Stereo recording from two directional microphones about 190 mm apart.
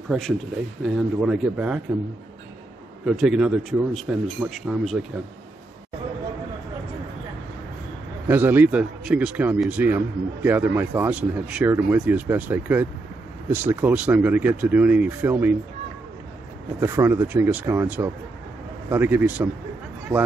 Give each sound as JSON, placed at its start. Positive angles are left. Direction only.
{"t": 0.8, "sound": "speech", "side_deg": -5}
{"t": 3.1, "sound": "speech", "side_deg": -5}
{"t": 8.3, "sound": "a man's voice", "side_deg": -10}
{"t": 16.8, "sound": "a man's voice", "side_deg": -10}